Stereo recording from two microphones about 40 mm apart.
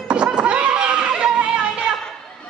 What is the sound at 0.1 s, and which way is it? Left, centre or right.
Chatter, right.